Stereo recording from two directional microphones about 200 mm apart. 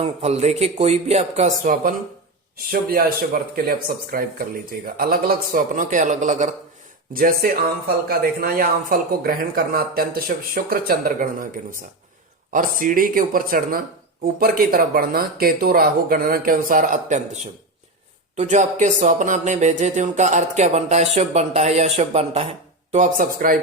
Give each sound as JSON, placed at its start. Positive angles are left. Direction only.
{"t": 0.0, "sound": "music", "side_deg": -35}
{"t": 2.9, "sound": "speech", "side_deg": -45}
{"t": 18.3, "sound": "music", "side_deg": -40}